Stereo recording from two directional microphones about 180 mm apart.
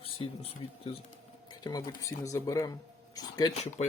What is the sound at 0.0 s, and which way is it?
Speech, 30° left (ahead or behind).